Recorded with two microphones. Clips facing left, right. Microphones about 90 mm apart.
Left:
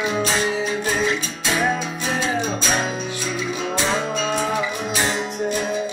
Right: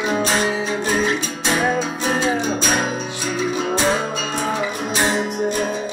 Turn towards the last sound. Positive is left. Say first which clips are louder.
# right 3 dB
turn(degrees=-45)  # may be behind; listen again after turning